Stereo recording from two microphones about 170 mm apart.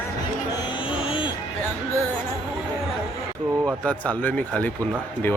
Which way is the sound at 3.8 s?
10° left (ahead or behind).